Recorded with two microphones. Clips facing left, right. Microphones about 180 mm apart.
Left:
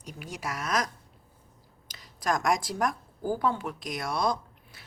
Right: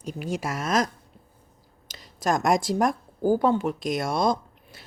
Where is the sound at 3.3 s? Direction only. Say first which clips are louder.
Right 7 dB; 25° right (ahead or behind).